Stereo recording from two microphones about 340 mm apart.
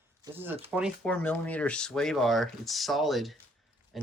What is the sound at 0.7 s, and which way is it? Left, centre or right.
Speech, centre.